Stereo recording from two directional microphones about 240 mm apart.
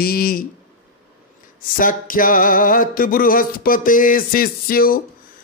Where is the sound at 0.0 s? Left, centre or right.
Left.